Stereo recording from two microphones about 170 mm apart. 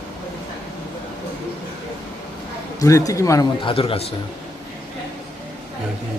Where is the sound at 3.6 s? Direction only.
35° left (ahead or behind).